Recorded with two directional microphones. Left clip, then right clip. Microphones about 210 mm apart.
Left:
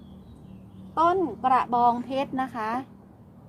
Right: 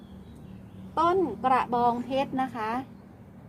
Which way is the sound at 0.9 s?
30° left (ahead or behind).